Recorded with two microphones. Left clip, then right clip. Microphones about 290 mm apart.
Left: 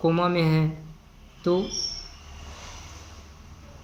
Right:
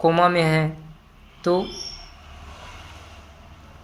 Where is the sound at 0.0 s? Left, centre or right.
Right.